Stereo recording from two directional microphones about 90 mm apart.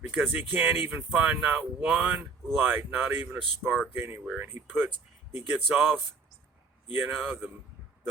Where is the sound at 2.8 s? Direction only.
20° right (ahead or behind).